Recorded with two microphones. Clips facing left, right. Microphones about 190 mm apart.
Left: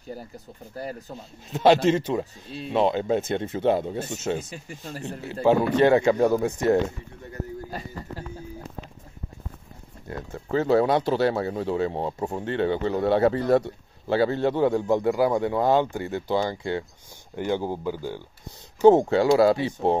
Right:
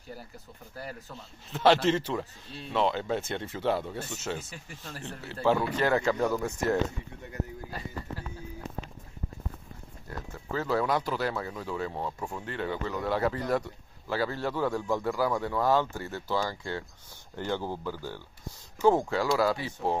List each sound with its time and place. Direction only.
0.7 s a man's voice: 20° left (ahead or behind)
10.0 s a man's voice: 25° left (ahead or behind)